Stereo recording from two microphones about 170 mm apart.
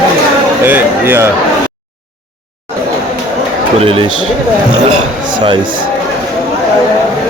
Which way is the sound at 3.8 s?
35° right (ahead or behind).